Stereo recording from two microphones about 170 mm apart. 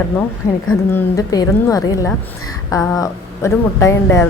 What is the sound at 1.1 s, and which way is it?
A woman's voice, 20° left (ahead or behind).